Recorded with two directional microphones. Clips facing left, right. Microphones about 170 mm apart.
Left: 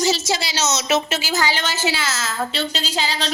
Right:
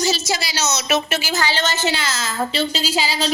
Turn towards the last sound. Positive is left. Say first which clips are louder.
# right 3 dB
turn(degrees=-5)  # may be behind; listen again after turning